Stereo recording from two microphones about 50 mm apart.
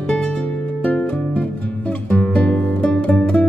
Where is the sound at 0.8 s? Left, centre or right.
Left.